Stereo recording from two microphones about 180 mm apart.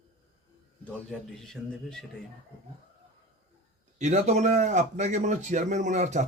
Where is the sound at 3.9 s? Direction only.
40° right (ahead or behind).